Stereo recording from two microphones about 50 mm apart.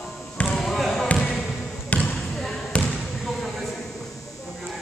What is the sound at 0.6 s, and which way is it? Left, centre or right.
Basketball bounce, centre.